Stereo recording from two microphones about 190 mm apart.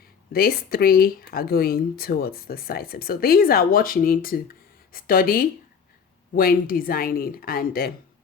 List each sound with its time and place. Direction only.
0.3 s speech: 50° left (ahead or behind)